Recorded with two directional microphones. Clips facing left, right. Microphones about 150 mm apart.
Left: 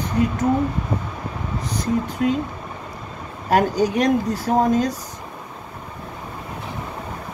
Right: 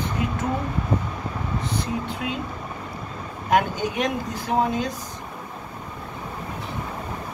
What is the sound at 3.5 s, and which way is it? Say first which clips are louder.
Speech: left 4 dB; 40° left (ahead or behind).